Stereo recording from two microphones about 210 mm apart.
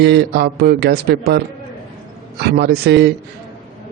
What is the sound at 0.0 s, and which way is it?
Speech, 50° right (ahead or behind).